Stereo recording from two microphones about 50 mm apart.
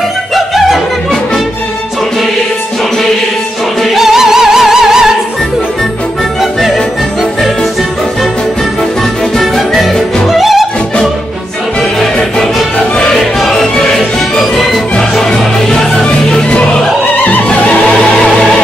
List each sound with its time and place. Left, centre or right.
3.8 s music: centre
9.4 s music: centre
12.0 s music: centre
17.2 s music: left
17.5 s music: left